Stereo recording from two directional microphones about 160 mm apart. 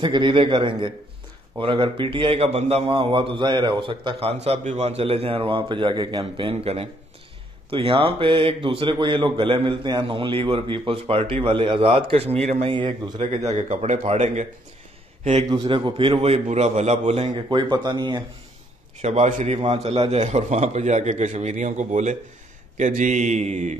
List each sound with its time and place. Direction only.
0.0 s a man's voice: 30° right (ahead or behind)
12.7 s speech: 25° right (ahead or behind)
13.5 s a man's voice: 40° right (ahead or behind)
15.2 s a man's voice: 25° right (ahead or behind)
17.3 s speech: 30° right (ahead or behind)
18.9 s a man's voice: 45° right (ahead or behind)